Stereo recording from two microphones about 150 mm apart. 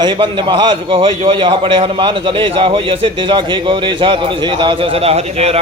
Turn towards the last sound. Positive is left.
turn(degrees=-45)  # may be behind; listen again after turning